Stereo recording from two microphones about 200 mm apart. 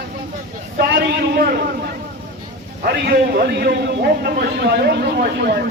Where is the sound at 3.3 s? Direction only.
50° right (ahead or behind).